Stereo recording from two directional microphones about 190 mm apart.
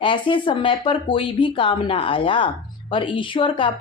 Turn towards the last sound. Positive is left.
turn(degrees=25)  # may be behind; listen again after turning